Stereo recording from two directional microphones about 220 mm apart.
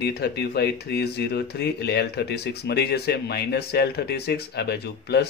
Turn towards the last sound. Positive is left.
turn(degrees=45)  # may be behind; listen again after turning